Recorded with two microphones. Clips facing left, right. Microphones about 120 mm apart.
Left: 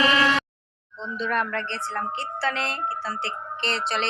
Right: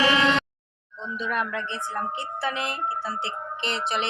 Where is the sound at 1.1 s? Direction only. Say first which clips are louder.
Left 2 dB; 10° right (ahead or behind).